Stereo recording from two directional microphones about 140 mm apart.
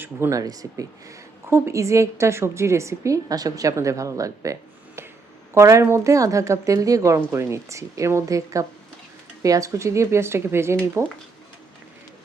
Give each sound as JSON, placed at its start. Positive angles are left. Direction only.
{"t": 0.0, "sound": "speech", "side_deg": -20}
{"t": 5.5, "sound": "speech", "side_deg": -20}